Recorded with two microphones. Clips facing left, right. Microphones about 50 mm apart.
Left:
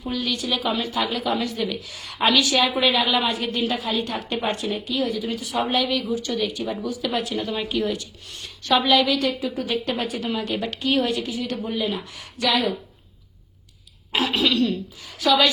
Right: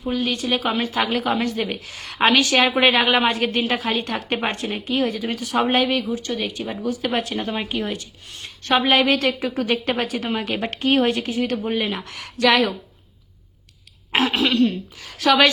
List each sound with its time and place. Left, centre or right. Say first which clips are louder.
0.0 s a woman's voice: right 3 dB; right
11.9 s speech: right 4 dB; right
14.1 s throat clearing: right 2 dB; right
14.9 s a woman's voice: right 2 dB; right